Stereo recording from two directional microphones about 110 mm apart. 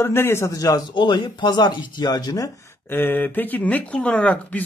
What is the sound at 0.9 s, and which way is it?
Speech, 45° left (ahead or behind).